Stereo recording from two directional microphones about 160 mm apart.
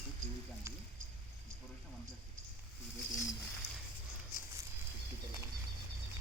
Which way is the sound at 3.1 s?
20° left (ahead or behind).